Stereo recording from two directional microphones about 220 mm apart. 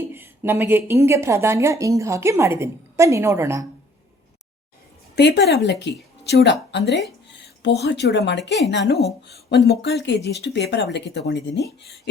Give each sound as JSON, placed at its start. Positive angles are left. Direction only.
{"t": 0.0, "sound": "a woman's voice", "side_deg": -10}
{"t": 5.1, "sound": "speech", "side_deg": 50}